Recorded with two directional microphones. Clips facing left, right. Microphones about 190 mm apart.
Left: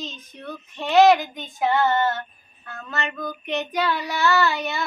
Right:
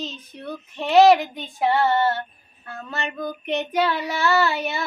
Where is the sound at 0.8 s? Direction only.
30° right (ahead or behind).